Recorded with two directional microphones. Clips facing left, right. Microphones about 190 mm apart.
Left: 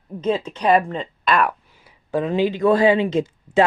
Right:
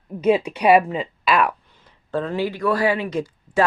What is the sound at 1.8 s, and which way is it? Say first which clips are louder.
Speech: left 3 dB; 10° left (ahead or behind).